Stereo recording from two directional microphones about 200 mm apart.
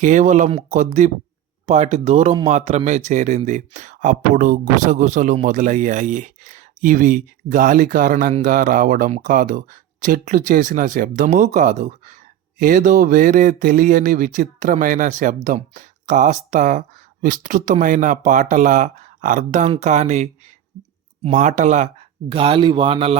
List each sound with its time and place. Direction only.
0.0 s speech: 40° right (ahead or behind)
22.3 s a man's voice: 25° right (ahead or behind)